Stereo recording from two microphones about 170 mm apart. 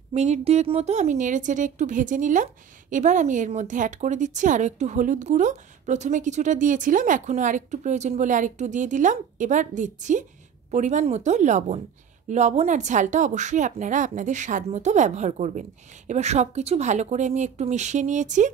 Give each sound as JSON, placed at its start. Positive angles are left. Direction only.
{"t": 0.1, "sound": "a woman's voice", "side_deg": -40}